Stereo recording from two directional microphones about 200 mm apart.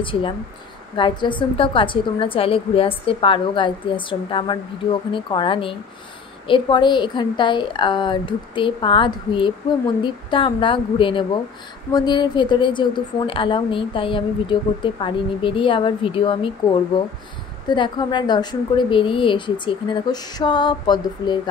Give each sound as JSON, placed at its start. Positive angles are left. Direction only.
{"t": 0.0, "sound": "a woman's voice", "side_deg": 25}
{"t": 17.6, "sound": "a woman's voice", "side_deg": 25}